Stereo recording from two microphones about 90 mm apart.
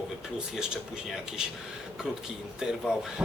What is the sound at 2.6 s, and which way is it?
Speech, 5° right (ahead or behind).